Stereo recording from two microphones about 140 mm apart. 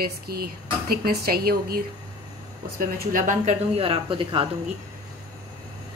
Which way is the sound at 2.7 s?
85° right.